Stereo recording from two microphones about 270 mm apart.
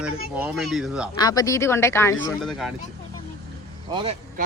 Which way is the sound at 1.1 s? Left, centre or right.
Centre.